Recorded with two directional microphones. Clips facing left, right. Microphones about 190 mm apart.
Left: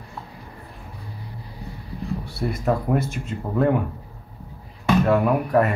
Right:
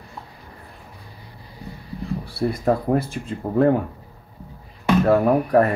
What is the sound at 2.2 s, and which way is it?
Speech, 35° right (ahead or behind).